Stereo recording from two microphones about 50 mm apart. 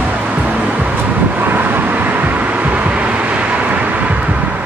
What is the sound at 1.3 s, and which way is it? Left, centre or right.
Vehicle, right.